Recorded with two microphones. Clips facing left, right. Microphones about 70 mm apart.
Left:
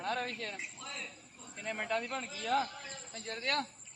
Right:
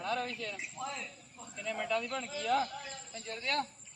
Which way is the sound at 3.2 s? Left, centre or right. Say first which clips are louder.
Even; left.